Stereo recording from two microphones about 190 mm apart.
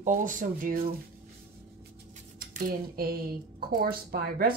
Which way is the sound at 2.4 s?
50° right (ahead or behind).